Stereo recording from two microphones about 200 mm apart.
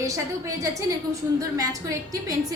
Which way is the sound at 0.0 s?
15° right (ahead or behind).